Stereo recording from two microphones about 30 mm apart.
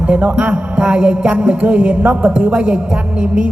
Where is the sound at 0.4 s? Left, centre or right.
Right.